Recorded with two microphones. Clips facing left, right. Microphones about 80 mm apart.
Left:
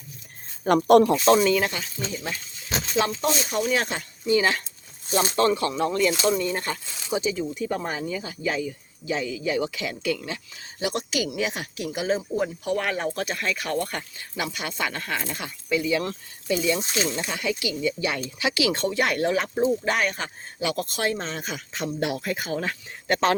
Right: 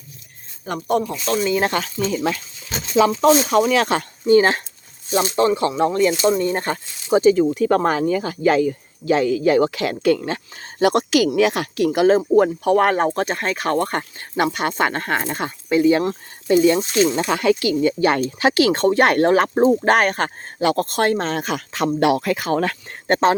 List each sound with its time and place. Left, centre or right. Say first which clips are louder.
0.6 s speech: left 5 dB; left
1.1 s speech: left 5 dB; left
1.6 s speech: right 8 dB; right
4.3 s speech: right 8 dB; right
5.4 s speech: right 5 dB; right
17.2 s speech: right 10 dB; right